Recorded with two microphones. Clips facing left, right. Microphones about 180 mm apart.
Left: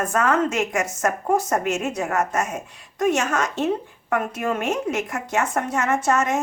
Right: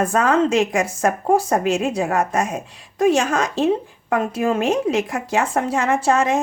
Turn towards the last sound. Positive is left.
turn(degrees=-30)  # may be behind; listen again after turning